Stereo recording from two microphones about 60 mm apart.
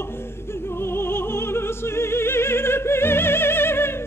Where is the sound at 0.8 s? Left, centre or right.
Left.